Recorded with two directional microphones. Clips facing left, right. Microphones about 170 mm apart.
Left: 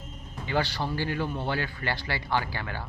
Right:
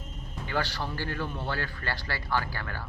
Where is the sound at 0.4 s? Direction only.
15° left (ahead or behind).